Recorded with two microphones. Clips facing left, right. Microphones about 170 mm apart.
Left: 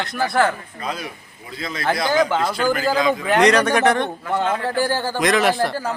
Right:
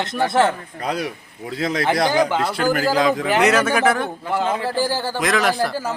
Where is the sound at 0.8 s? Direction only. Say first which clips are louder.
Right 8 dB; 70° right (ahead or behind).